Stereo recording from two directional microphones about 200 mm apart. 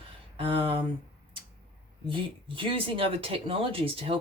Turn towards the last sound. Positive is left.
turn(degrees=-25)  # may be behind; listen again after turning